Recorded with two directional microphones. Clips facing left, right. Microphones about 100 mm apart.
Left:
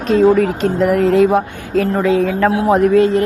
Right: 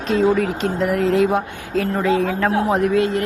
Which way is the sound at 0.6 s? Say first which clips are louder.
Left 5 dB; 55° left (ahead or behind).